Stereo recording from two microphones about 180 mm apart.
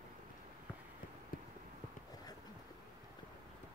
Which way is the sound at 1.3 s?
55° left (ahead or behind).